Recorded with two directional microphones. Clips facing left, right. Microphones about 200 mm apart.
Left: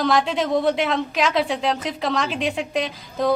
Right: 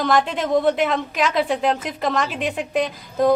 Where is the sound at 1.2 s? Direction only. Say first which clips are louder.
Right 3 dB; 50° right (ahead or behind).